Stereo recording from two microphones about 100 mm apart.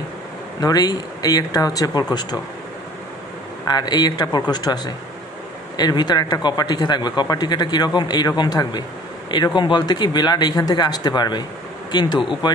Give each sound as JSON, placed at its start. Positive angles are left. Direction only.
{"t": 0.6, "sound": "speech", "side_deg": 40}
{"t": 3.6, "sound": "speech", "side_deg": 45}